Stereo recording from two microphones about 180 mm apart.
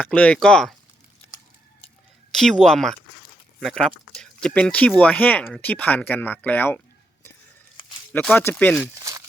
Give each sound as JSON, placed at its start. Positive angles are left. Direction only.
{"t": 0.0, "sound": "speech", "side_deg": 5}
{"t": 2.3, "sound": "speech", "side_deg": 0}
{"t": 8.1, "sound": "speech", "side_deg": 10}